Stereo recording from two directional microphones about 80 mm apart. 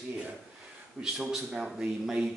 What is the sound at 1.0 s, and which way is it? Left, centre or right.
Speech, centre.